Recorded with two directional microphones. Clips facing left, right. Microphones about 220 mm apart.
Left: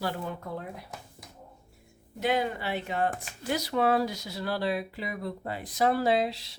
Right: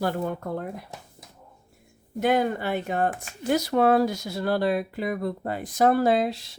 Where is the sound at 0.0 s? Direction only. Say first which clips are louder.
Right 6 dB; 50° right (ahead or behind).